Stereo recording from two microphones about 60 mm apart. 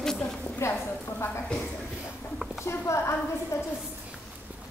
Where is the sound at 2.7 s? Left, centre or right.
Left.